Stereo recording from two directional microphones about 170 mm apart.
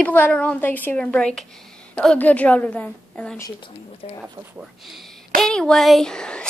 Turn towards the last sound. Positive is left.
turn(degrees=5)  # may be behind; listen again after turning